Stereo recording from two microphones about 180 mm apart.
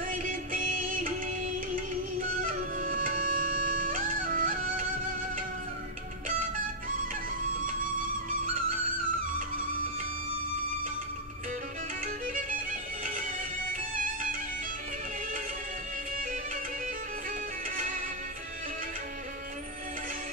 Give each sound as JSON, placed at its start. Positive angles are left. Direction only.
{"t": 0.1, "sound": "music", "side_deg": -45}
{"t": 13.0, "sound": "music", "side_deg": -50}